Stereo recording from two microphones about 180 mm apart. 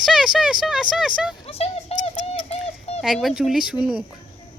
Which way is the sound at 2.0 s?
35° left (ahead or behind).